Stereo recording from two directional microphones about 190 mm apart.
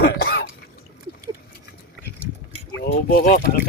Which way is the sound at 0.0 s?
55° left (ahead or behind).